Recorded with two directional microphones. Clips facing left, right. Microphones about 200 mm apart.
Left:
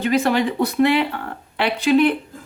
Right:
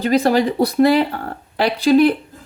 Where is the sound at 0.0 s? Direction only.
35° right (ahead or behind).